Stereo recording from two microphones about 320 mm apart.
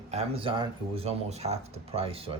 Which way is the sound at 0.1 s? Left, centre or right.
Centre.